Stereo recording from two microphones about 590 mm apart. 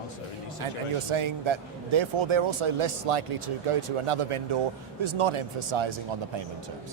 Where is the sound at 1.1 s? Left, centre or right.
Right.